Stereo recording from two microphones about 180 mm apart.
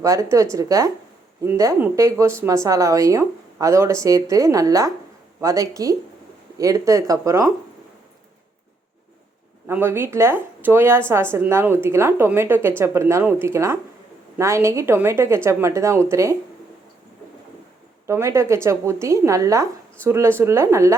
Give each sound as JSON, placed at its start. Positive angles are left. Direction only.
{"t": 0.0, "sound": "speech", "side_deg": -15}
{"t": 9.6, "sound": "speech", "side_deg": -15}
{"t": 18.0, "sound": "speech", "side_deg": -15}